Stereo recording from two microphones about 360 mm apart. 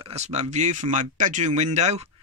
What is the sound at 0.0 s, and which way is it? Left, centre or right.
Speech, centre.